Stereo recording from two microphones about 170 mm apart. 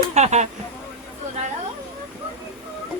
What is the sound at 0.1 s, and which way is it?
Speech, 40° right (ahead or behind).